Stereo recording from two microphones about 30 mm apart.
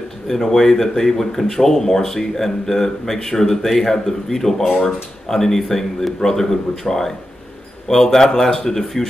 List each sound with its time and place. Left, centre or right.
0.3 s speech: centre